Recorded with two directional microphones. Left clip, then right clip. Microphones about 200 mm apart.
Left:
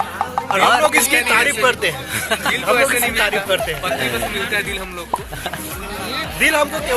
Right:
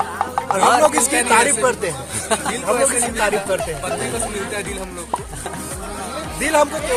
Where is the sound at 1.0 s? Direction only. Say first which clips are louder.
Left 1 dB; 15° right (ahead or behind).